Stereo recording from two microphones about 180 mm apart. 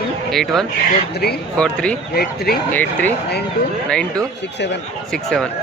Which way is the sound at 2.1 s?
60° left (ahead or behind).